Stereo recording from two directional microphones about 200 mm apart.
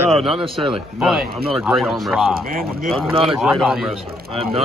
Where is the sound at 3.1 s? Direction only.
25° right (ahead or behind).